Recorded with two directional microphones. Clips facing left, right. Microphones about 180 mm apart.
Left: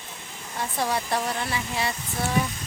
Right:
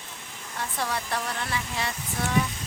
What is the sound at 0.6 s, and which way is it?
Speech, 15° left (ahead or behind).